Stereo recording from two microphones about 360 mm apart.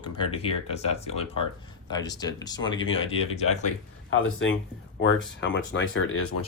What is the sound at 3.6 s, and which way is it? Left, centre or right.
Speech, left.